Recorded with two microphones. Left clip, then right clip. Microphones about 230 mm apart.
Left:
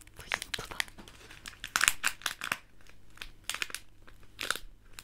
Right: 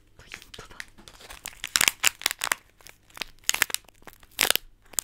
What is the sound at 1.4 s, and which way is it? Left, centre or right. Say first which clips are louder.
Crumpling: right 5 dB; right.